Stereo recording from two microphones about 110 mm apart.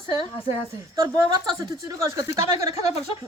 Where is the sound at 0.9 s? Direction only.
35° right (ahead or behind).